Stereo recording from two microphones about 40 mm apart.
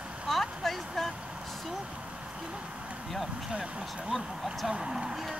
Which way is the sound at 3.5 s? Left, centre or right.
Centre.